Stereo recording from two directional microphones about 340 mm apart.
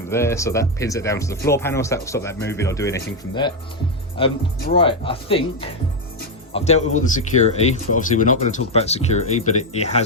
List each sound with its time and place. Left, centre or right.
0.1 s speech: centre